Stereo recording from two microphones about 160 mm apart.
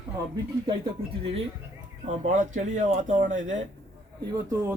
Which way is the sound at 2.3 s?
50° right (ahead or behind).